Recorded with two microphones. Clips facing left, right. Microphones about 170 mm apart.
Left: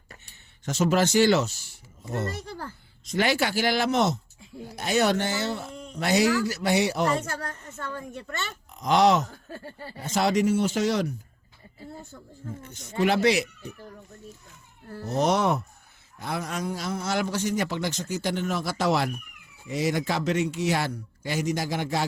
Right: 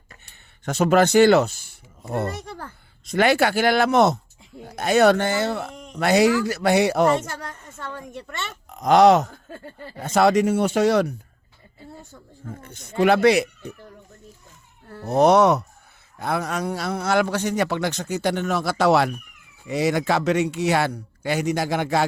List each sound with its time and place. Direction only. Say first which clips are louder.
0.6 s a man's voice: right 5 dB; 60° right (ahead or behind)
8.7 s a man's voice: right 6 dB; 55° right (ahead or behind)
12.6 s a man's voice: right 6 dB; 60° right (ahead or behind)
15.0 s a man's voice: right 8 dB; 60° right (ahead or behind)
16.1 s a man's voice: right 6 dB; 60° right (ahead or behind)